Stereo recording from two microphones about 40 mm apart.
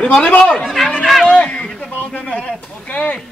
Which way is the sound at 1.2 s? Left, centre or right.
Left.